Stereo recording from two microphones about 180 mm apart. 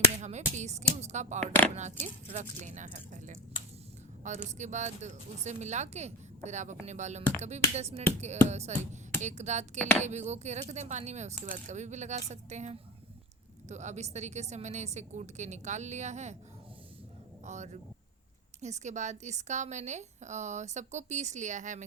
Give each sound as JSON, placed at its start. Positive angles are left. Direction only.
{"t": 0.2, "sound": "finger snapping", "side_deg": -40}
{"t": 1.0, "sound": "a woman's voice", "side_deg": -40}
{"t": 17.4, "sound": "a woman's voice", "side_deg": -40}